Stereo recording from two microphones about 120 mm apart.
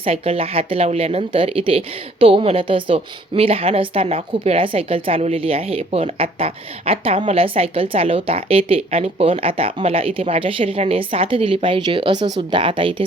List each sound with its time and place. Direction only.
0.0 s speech: 55° right (ahead or behind)